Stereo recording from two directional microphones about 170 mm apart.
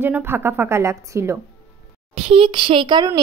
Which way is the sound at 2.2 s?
35° right (ahead or behind).